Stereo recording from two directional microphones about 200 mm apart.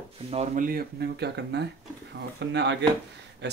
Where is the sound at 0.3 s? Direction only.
35° right (ahead or behind).